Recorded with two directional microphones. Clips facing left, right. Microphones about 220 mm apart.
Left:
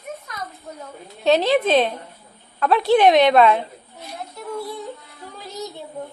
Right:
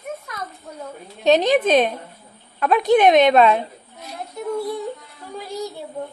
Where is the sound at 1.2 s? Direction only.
20° right (ahead or behind).